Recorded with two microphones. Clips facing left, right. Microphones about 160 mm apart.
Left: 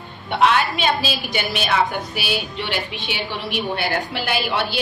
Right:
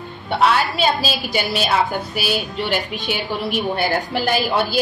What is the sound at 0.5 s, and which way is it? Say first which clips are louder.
A woman's voice: right 1 dB; 40° right (ahead or behind).